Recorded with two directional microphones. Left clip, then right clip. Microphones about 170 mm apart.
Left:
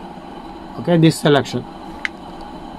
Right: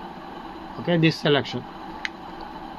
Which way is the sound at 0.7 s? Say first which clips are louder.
Left 7 dB; centre (ahead or behind).